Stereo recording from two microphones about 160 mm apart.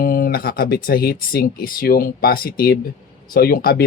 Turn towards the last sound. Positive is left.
turn(degrees=65)  # may be behind; listen again after turning